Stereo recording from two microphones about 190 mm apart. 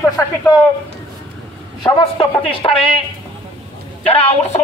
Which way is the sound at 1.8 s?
25° left (ahead or behind).